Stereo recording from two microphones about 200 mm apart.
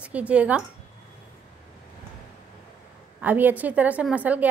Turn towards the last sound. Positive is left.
turn(degrees=-5)  # may be behind; listen again after turning